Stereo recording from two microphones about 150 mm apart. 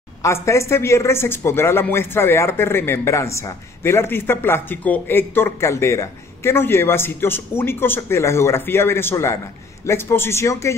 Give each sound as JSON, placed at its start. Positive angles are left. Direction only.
{"t": 0.2, "sound": "speech", "side_deg": 20}